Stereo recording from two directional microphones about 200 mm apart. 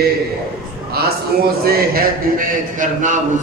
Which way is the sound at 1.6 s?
45° right (ahead or behind).